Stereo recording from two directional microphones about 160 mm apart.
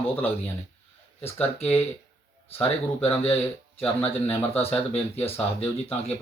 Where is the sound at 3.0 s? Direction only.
40° left (ahead or behind).